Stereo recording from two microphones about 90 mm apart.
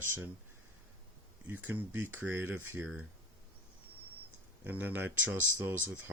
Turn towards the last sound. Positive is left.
turn(degrees=-25)  # may be behind; listen again after turning